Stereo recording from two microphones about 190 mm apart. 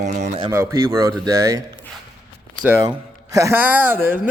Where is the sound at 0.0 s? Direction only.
40° right (ahead or behind).